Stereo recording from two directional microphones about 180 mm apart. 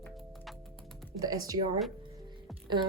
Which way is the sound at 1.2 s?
20° right (ahead or behind).